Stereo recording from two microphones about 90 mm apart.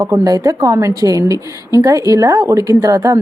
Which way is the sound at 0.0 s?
40° right (ahead or behind).